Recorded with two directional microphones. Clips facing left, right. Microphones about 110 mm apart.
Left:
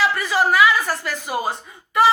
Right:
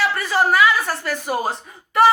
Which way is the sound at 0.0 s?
50° right (ahead or behind).